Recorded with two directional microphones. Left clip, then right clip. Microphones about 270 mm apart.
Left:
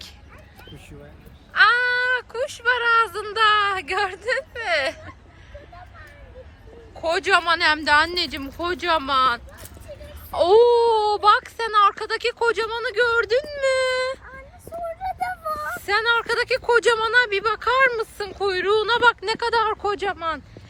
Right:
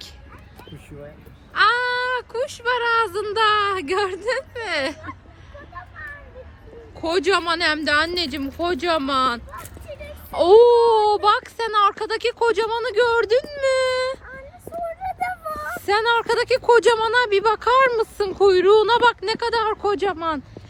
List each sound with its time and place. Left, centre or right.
1.5 s speech: centre
7.0 s speech: centre
15.0 s a sound: centre
15.7 s speech: centre